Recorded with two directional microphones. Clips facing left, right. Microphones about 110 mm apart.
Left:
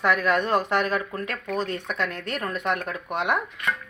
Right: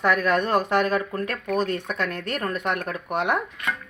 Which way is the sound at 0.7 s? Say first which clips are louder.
Right 2 dB; 35° right (ahead or behind).